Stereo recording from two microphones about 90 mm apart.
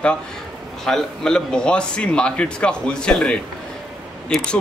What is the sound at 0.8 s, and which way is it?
Speech, 5° left (ahead or behind).